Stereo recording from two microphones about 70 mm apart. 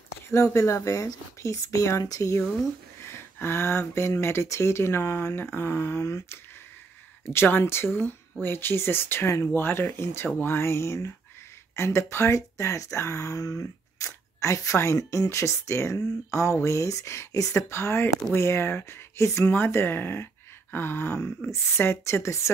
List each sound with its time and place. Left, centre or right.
0.3 s speech: left
3.1 s speech: left
7.3 s speech: left